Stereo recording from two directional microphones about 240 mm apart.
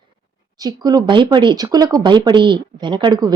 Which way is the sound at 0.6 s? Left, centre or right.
Centre.